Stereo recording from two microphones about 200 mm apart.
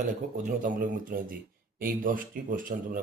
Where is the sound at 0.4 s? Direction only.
40° right (ahead or behind).